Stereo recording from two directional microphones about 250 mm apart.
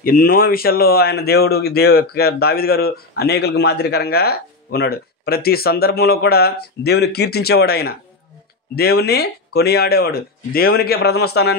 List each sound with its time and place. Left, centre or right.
0.0 s speech: left